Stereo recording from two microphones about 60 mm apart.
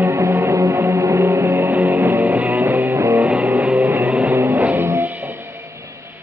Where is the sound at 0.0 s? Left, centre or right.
Right.